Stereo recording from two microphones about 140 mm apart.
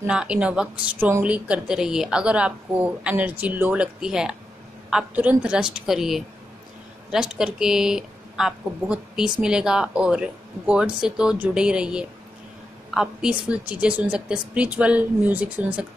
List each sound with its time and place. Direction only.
0.0 s a woman's voice: 5° right (ahead or behind)